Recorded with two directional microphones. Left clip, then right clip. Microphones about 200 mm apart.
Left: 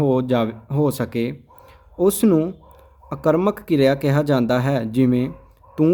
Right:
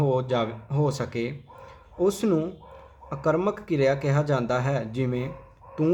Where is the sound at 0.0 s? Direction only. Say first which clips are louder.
Left 5 dB; 45° left (ahead or behind).